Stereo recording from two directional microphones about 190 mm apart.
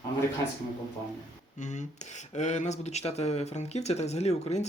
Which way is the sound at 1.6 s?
40° left (ahead or behind).